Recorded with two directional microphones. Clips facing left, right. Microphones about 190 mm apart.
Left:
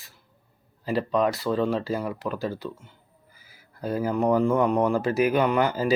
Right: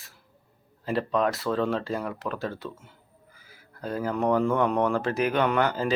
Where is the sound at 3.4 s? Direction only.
10° left (ahead or behind).